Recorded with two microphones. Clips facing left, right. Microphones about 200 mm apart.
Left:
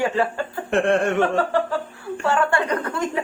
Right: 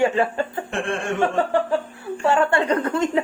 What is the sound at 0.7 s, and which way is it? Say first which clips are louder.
Speech: left 7 dB; 65° left (ahead or behind).